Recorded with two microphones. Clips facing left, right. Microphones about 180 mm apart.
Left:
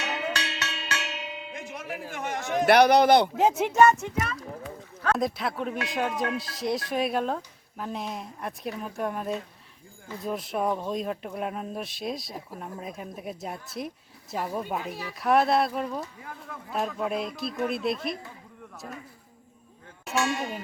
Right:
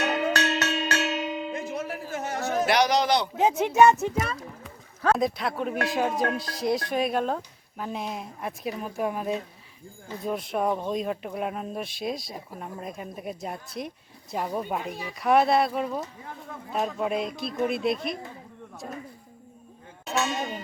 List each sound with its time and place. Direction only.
0.0 s music: 45° right (ahead or behind)
2.6 s speech: 55° left (ahead or behind)
3.3 s speech: 5° left (ahead or behind)
3.8 s speech: 10° right (ahead or behind)
4.0 s a child's voice: 35° right (ahead or behind)
5.1 s speech: centre (ahead or behind)
16.0 s speech: 30° right (ahead or behind)
16.7 s speech: centre (ahead or behind)